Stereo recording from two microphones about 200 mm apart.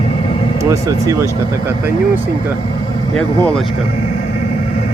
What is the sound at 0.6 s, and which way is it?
Speech, 15° right (ahead or behind).